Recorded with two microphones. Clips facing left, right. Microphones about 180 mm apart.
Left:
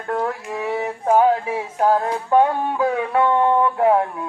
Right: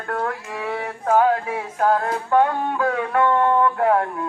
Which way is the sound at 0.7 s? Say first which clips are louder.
Left 2 dB; 25° left (ahead or behind).